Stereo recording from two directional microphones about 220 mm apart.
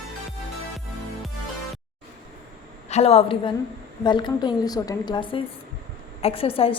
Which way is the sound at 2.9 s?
30° left (ahead or behind).